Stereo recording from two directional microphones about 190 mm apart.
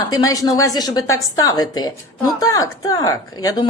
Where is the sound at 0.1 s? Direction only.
20° left (ahead or behind).